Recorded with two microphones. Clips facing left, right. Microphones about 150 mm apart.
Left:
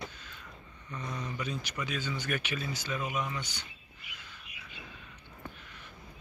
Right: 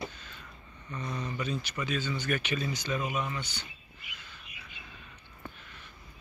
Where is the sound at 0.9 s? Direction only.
10° left (ahead or behind).